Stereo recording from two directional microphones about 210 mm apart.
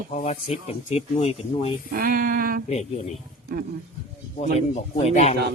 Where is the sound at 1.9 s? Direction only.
45° right (ahead or behind).